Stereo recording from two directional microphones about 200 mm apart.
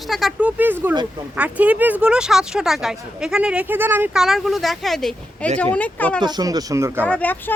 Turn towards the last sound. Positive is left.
turn(degrees=10)  # may be behind; listen again after turning